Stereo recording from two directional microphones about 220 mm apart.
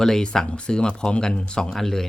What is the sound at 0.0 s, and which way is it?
Speech, 5° left (ahead or behind).